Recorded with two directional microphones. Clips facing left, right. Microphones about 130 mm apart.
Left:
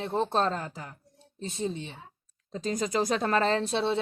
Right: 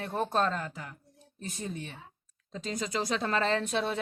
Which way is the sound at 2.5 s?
40° left (ahead or behind).